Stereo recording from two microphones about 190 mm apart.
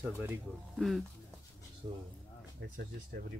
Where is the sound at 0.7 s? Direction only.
Centre (ahead or behind).